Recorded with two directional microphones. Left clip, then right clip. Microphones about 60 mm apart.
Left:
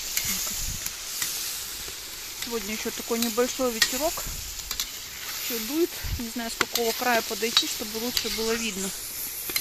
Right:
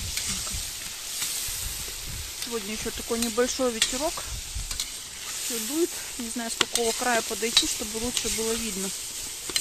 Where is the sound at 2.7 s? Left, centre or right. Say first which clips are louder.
Left 1 dB; centre.